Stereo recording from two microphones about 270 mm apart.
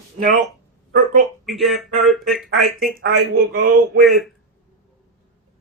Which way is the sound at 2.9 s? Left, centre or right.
Right.